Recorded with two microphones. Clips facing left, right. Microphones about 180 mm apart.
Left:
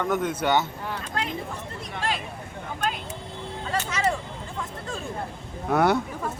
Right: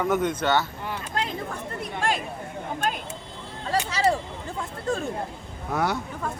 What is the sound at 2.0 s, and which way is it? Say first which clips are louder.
Speech: right 3 dB; 45° right (ahead or behind).